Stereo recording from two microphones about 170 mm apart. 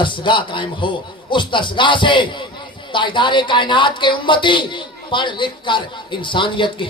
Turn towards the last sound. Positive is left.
turn(degrees=30)  # may be behind; listen again after turning